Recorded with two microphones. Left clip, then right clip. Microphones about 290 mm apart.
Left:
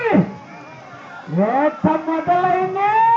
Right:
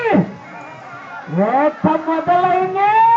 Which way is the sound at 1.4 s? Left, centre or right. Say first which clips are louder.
Right 2 dB; centre.